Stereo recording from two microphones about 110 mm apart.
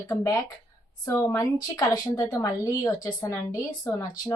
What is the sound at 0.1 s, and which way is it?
A woman's voice, 25° left (ahead or behind).